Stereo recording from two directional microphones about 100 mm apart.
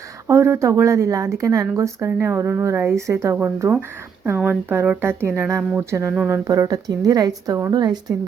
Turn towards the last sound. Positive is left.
turn(degrees=-45)  # may be behind; listen again after turning